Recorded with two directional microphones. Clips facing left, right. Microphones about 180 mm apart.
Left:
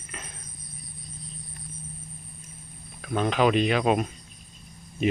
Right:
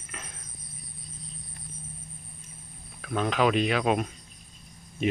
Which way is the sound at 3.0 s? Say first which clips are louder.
Left 2 dB; centre (ahead or behind).